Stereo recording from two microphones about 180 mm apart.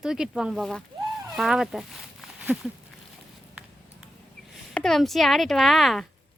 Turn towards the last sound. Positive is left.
turn(degrees=0)  # may be behind; listen again after turning